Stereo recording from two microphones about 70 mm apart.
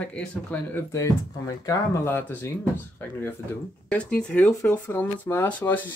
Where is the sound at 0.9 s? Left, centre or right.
Left.